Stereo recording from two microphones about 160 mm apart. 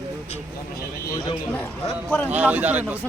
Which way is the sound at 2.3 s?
10° right (ahead or behind).